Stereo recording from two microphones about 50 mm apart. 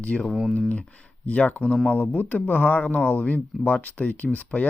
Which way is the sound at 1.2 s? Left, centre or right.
Left.